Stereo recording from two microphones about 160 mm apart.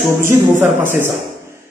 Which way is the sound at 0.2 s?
15° right (ahead or behind).